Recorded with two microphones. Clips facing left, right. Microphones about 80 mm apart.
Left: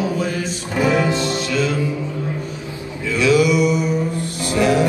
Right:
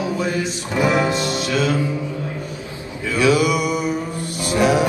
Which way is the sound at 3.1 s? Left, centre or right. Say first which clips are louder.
Left 1 dB; right.